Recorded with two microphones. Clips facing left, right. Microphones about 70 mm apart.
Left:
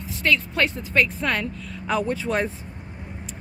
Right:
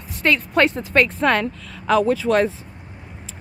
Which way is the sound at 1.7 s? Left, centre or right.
Right.